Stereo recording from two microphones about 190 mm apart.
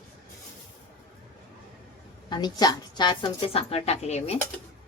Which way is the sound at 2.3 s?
20° left (ahead or behind).